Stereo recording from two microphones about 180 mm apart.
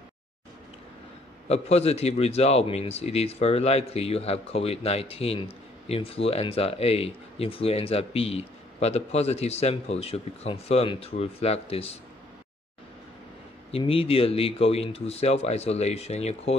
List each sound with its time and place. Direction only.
1.5 s speech: 35° left (ahead or behind)
13.7 s speech: 30° left (ahead or behind)